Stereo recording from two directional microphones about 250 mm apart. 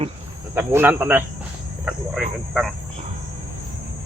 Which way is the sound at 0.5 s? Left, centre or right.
Centre.